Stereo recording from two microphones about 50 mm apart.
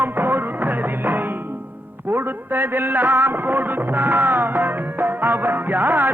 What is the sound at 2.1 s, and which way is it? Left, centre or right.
Speech, right.